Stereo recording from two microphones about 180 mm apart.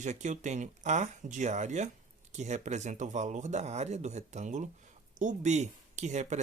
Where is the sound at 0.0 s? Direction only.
40° right (ahead or behind).